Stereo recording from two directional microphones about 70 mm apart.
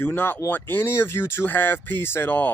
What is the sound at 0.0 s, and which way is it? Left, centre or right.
Speech, left.